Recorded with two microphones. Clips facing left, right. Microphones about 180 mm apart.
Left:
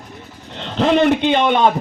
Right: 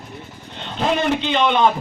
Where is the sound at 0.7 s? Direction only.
70° left (ahead or behind); by 1.6 s 55° left (ahead or behind).